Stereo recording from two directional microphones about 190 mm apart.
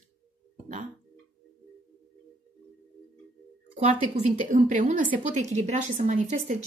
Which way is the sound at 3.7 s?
40° right (ahead or behind).